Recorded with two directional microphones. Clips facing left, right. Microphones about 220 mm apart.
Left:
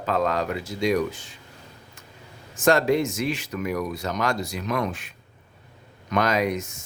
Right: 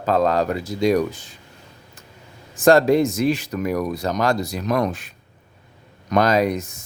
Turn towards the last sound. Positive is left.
turn(degrees=-35)  # may be behind; listen again after turning